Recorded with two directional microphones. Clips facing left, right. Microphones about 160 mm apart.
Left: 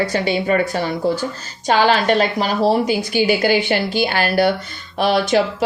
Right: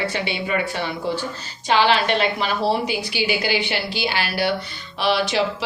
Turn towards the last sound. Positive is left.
turn(degrees=45)  # may be behind; listen again after turning